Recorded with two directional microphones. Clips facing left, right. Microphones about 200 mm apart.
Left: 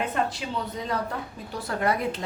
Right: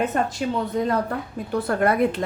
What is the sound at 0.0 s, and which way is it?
A woman's voice, 45° right (ahead or behind).